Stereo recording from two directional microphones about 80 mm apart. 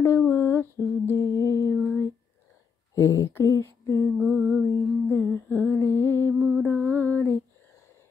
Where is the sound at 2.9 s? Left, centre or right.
Left.